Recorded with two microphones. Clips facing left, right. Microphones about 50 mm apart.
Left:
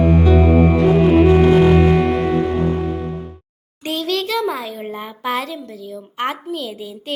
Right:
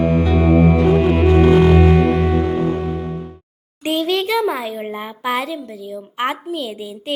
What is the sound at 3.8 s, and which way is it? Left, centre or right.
A child's voice, centre.